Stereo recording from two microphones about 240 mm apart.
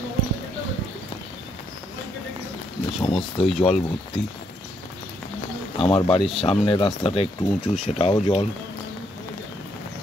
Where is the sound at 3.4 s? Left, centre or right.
Left.